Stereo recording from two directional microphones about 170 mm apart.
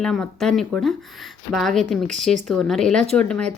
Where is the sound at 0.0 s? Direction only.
5° left (ahead or behind).